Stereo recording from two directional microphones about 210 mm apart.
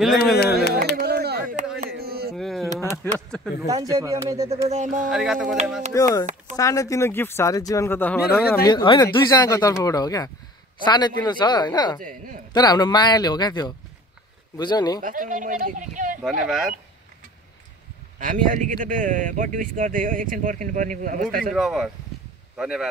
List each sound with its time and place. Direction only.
0.9 s chop: 50° right (ahead or behind)
1.8 s a sound: 50° right (ahead or behind)
2.3 s a sound: centre (ahead or behind)
3.6 s speech: 15° right (ahead or behind)
4.5 s speech: 35° right (ahead or behind)
5.1 s speech: centre (ahead or behind)
5.9 s speech: 15° left (ahead or behind)
8.6 s speech: 20° left (ahead or behind)
12.0 s speech: 40° right (ahead or behind)
12.5 s speech: 20° left (ahead or behind)
15.0 s speech: 40° right (ahead or behind)
16.2 s speech: 5° right (ahead or behind)
18.2 s speech: 40° right (ahead or behind)
21.5 s speech: centre (ahead or behind)